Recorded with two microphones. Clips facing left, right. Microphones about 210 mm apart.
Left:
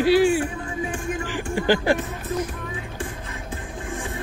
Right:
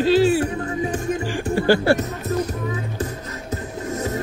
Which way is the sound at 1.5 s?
15° left (ahead or behind).